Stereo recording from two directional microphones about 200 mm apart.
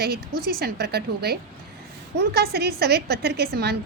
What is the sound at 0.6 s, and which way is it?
A woman's voice, 55° right (ahead or behind).